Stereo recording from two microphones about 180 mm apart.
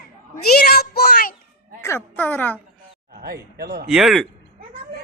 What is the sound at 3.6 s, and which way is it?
Speech, 60° right (ahead or behind).